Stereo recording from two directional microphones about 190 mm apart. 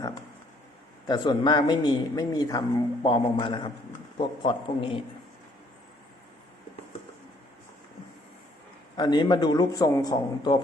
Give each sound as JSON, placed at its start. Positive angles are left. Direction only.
{"t": 1.0, "sound": "speech", "side_deg": 20}
{"t": 9.0, "sound": "speech", "side_deg": 25}